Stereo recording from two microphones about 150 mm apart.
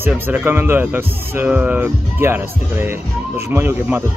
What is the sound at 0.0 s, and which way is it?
Speech, 15° right (ahead or behind).